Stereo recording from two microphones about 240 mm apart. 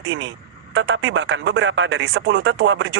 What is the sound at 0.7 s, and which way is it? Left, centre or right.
Speech, right.